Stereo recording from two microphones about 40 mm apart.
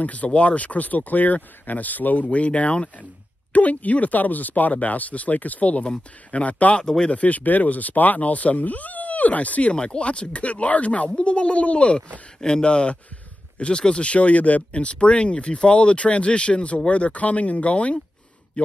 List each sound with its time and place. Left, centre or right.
0.0 s speech: left
2.3 s speech: left
6.8 s speech: centre
7.1 s speech: left
12.4 s speech: centre
12.6 s speech: left